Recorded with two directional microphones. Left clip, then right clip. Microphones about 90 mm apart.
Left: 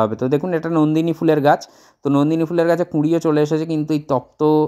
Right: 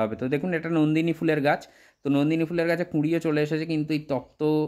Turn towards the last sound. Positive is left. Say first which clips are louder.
# left 9 dB
turn(degrees=40)  # may be behind; listen again after turning